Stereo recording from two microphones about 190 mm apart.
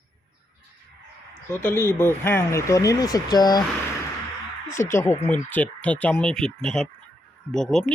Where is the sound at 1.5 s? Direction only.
10° left (ahead or behind).